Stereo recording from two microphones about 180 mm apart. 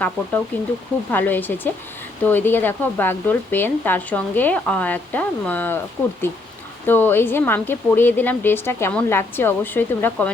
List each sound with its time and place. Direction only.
0.0 s speech: 10° left (ahead or behind)
6.8 s speech: 10° left (ahead or behind)